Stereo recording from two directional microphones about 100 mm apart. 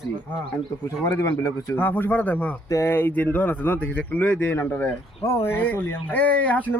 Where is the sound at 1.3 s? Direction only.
30° left (ahead or behind).